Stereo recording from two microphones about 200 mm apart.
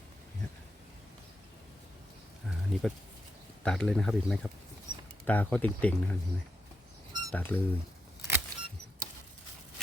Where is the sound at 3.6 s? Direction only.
5° left (ahead or behind).